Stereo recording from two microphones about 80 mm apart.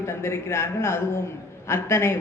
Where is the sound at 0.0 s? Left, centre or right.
Left.